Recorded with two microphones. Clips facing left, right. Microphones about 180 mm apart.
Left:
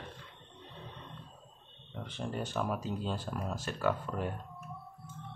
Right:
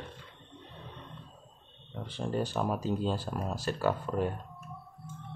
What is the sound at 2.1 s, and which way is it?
Speech, 35° right (ahead or behind).